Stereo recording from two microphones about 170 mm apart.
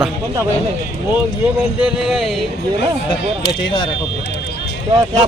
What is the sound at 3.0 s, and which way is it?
Speech, 30° left (ahead or behind).